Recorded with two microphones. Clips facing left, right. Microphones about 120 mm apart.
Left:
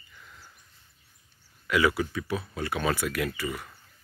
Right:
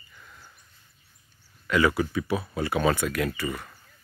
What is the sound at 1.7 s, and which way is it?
Speech, 5° left (ahead or behind).